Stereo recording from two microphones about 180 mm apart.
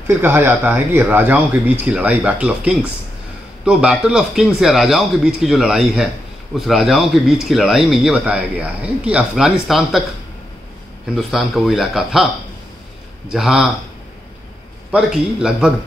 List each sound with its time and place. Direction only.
0.2 s speech: 10° right (ahead or behind)
11.1 s speech: centre (ahead or behind)
13.3 s speech: centre (ahead or behind)
14.9 s speech: 5° right (ahead or behind)